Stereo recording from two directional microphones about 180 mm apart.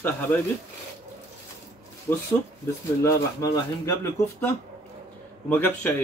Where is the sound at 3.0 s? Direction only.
15° left (ahead or behind).